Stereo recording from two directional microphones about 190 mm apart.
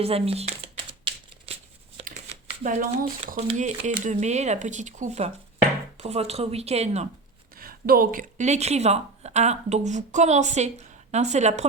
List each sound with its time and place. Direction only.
0.0 s speech: 30° right (ahead or behind)
1.1 s a sound: 25° right (ahead or behind)
2.6 s speech: 45° right (ahead or behind)
7.5 s a woman's voice: 50° right (ahead or behind)